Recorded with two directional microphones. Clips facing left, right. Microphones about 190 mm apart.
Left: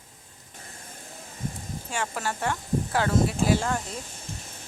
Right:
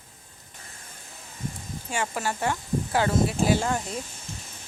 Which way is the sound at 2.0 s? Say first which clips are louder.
Right 2 dB; 5° right (ahead or behind).